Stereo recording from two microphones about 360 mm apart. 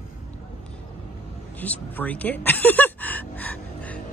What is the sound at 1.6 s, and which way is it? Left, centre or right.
Speech, centre.